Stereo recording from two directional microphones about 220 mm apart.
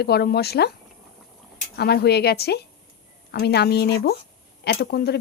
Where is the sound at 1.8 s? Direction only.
45° left (ahead or behind).